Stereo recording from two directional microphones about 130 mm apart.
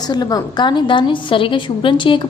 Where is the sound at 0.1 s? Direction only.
30° left (ahead or behind).